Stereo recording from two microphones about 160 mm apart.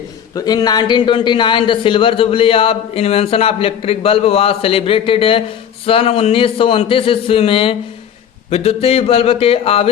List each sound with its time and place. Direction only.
0.3 s a man's voice: 25° left (ahead or behind)